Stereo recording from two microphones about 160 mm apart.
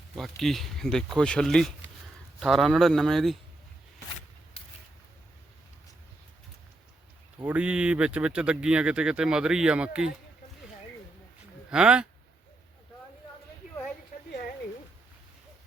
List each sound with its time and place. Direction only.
0.2 s speech: centre (ahead or behind)
7.4 s speech: 10° right (ahead or behind)
11.7 s speech: 5° right (ahead or behind)